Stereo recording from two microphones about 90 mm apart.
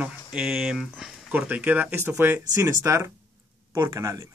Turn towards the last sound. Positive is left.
turn(degrees=-40)  # may be behind; listen again after turning